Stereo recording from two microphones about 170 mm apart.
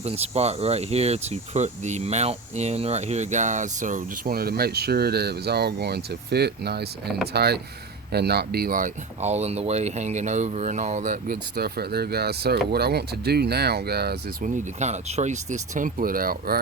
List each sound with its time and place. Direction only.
0.0 s speech: 40° right (ahead or behind)
11.5 s speech: 65° right (ahead or behind)
14.4 s speech: 45° right (ahead or behind)